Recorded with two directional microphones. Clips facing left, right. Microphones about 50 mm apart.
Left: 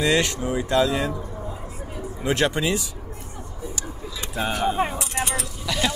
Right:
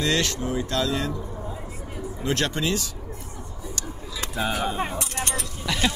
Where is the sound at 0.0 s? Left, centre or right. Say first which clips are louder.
Left 3 dB; centre.